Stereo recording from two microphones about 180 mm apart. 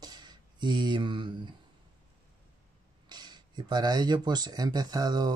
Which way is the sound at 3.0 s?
25° right (ahead or behind).